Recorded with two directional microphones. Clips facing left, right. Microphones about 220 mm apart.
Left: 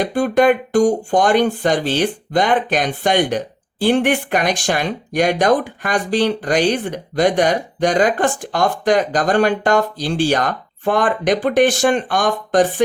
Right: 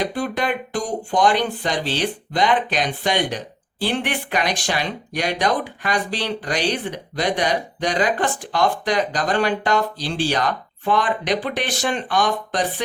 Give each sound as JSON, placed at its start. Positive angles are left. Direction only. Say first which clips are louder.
{"t": 0.0, "sound": "speech", "louder": "left 8 dB", "side_deg": 50}